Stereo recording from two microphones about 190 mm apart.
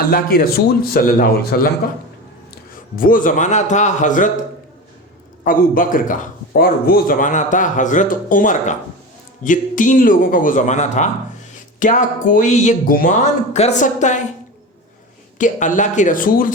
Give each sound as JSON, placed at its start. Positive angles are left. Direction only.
{"t": 0.0, "sound": "a man's voice", "side_deg": 50}
{"t": 2.7, "sound": "speech", "side_deg": 45}
{"t": 5.5, "sound": "a man's voice", "side_deg": 45}
{"t": 15.4, "sound": "speech", "side_deg": 40}